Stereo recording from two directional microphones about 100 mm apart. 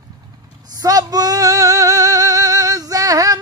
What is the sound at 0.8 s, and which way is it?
Singing, 40° right (ahead or behind).